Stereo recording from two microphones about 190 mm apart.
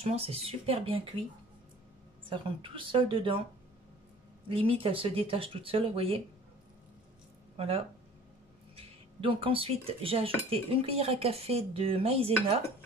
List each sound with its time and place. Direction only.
0.0 s cutlery: 30° right (ahead or behind)
2.2 s speech: 25° right (ahead or behind)
4.5 s speech: 30° right (ahead or behind)
7.5 s speech: 30° right (ahead or behind)
8.7 s cutlery: 30° right (ahead or behind)